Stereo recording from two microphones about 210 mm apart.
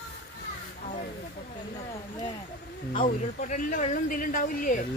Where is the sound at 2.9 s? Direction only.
40° left (ahead or behind).